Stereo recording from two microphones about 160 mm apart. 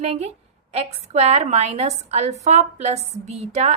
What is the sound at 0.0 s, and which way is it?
A woman's voice, 45° right (ahead or behind).